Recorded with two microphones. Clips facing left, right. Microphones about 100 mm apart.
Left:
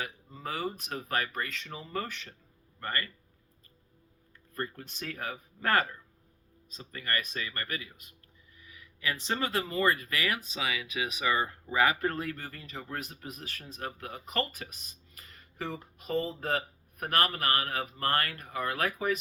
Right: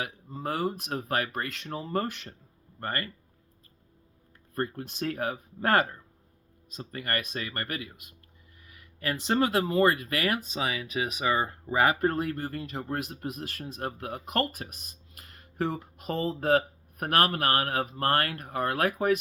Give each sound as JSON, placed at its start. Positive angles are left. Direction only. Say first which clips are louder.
{"t": 0.0, "sound": "speech", "louder": "right 4 dB", "side_deg": -55}
{"t": 2.8, "sound": "speech", "louder": "right 2 dB", "side_deg": -45}
{"t": 4.5, "sound": "speech", "louder": "right 6 dB", "side_deg": -55}
{"t": 6.9, "sound": "speech", "louder": "right 2 dB", "side_deg": -50}
{"t": 9.0, "sound": "speech", "louder": "right 6 dB", "side_deg": -45}
{"t": 9.7, "sound": "speech", "louder": "right 4 dB", "side_deg": -55}
{"t": 10.2, "sound": "speech", "louder": "right 4 dB", "side_deg": -40}
{"t": 12.1, "sound": "speech", "louder": "right 6 dB", "side_deg": -50}